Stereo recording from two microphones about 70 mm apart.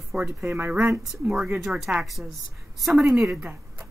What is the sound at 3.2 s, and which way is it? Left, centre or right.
Speech, centre.